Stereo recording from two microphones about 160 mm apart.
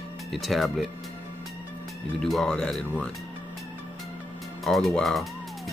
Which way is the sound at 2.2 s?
5° left (ahead or behind).